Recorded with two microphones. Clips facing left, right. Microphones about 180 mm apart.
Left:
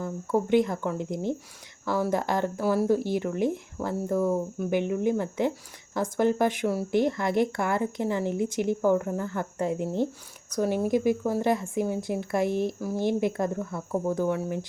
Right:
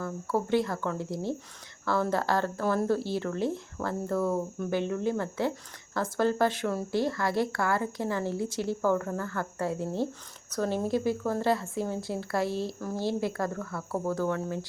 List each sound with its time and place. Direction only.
0.0 s speech: 20° left (ahead or behind)